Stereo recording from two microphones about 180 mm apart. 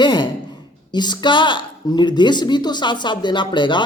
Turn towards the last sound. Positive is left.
turn(degrees=25)  # may be behind; listen again after turning